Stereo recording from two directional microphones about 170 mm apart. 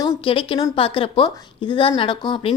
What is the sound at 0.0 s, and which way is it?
A woman's voice, 30° left (ahead or behind).